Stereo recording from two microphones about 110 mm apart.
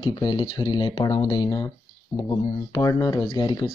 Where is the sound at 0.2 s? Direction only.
40° left (ahead or behind).